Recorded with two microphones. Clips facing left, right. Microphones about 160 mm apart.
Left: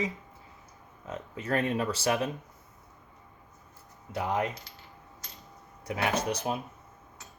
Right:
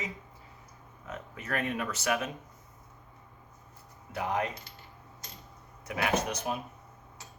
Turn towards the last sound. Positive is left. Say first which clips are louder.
# left 1 dB
turn(degrees=30)  # may be behind; listen again after turning